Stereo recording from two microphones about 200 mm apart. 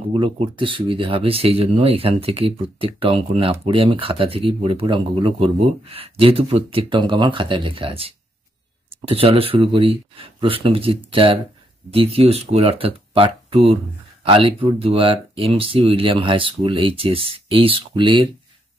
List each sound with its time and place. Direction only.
0.1 s speech: 25° right (ahead or behind)